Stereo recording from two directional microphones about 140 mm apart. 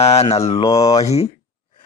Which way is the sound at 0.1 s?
50° left (ahead or behind).